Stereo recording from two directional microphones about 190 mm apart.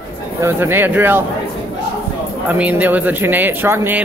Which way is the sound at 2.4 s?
5° right (ahead or behind).